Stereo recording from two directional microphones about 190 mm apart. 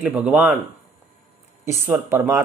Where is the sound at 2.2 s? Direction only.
15° right (ahead or behind).